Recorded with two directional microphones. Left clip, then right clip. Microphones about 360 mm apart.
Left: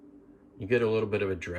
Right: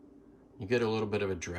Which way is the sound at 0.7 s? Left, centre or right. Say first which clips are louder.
Left 4 dB; centre.